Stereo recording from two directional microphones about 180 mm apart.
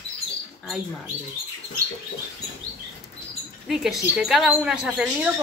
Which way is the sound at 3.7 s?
Centre (ahead or behind).